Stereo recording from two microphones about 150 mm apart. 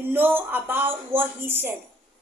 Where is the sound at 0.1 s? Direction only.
15° right (ahead or behind).